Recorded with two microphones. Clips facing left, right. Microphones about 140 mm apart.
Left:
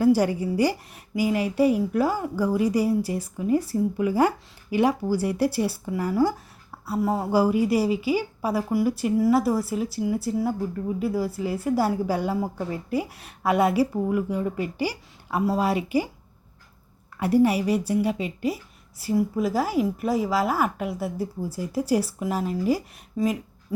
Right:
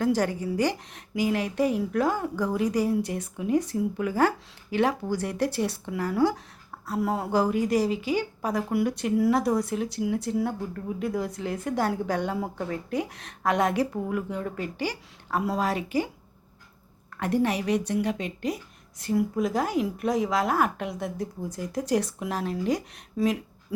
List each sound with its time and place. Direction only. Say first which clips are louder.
0.0 s speech: left 5 dB; 10° left (ahead or behind)
17.2 s a woman's voice: left 5 dB; 10° left (ahead or behind)